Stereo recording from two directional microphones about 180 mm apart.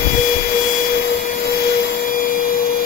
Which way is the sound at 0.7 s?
55° left (ahead or behind).